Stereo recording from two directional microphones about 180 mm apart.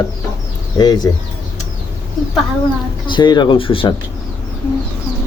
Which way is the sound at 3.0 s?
25° left (ahead or behind).